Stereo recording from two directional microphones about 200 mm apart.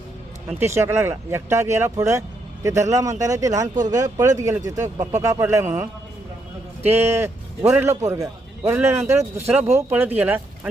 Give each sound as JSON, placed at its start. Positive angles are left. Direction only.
{"t": 0.6, "sound": "a man's voice", "side_deg": -15}